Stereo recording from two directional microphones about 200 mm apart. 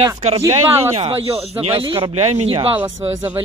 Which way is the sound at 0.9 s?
30° right (ahead or behind).